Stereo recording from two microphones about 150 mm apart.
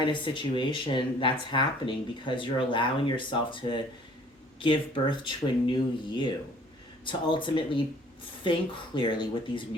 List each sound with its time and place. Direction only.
0.0 s speech: 30° left (ahead or behind)
9.0 s speech: 30° left (ahead or behind)